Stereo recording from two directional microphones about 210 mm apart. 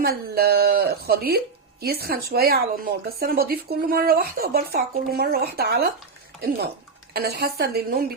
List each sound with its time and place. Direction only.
0.0 s speech: 50° right (ahead or behind)
7.1 s speech: 50° right (ahead or behind)